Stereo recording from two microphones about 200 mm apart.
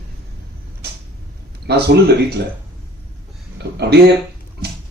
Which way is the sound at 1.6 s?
55° right (ahead or behind).